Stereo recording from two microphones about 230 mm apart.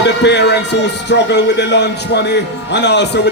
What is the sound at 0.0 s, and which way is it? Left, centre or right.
A man's voice, left.